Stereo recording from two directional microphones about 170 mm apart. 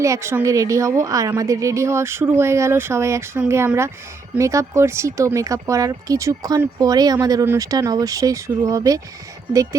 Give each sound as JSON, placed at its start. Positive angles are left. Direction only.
{"t": 0.0, "sound": "a woman's voice", "side_deg": -15}